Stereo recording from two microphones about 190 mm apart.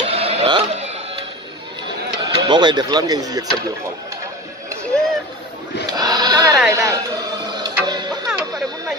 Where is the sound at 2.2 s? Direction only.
25° right (ahead or behind).